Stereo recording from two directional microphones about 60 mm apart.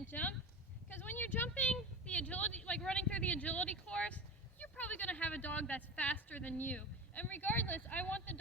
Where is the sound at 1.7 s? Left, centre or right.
Left.